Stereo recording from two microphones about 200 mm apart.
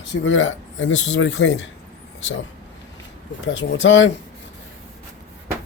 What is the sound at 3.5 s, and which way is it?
Speech, 65° left (ahead or behind).